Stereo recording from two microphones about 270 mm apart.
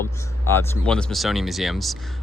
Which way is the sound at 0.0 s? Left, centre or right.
Centre.